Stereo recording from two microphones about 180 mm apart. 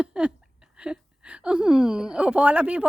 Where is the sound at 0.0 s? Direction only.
5° right (ahead or behind).